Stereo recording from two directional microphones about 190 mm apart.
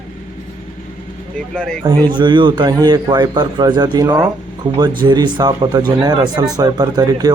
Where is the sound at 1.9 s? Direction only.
25° right (ahead or behind).